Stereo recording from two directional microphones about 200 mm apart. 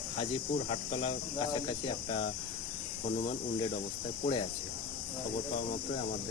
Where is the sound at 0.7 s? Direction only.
30° left (ahead or behind).